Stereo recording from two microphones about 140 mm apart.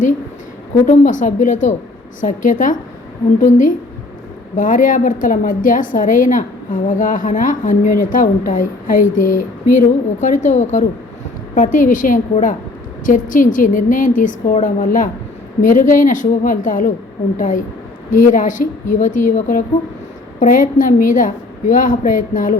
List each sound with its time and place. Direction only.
0.9 s a woman's voice: 65° left (ahead or behind)